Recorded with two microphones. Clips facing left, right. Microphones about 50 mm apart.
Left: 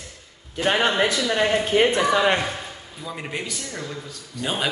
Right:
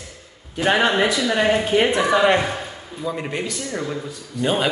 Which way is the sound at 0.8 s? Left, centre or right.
Centre.